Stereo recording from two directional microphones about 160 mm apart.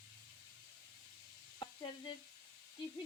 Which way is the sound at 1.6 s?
30° left (ahead or behind).